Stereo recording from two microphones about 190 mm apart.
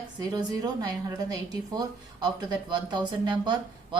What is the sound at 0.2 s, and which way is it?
A woman's voice, 20° right (ahead or behind).